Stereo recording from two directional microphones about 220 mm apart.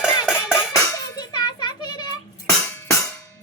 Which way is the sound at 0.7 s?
20° left (ahead or behind).